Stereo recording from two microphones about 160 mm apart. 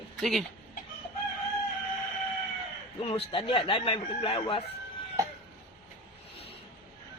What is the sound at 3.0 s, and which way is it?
Speech, 35° left (ahead or behind).